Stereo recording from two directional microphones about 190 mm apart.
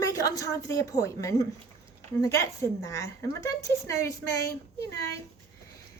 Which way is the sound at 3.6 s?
15° left (ahead or behind).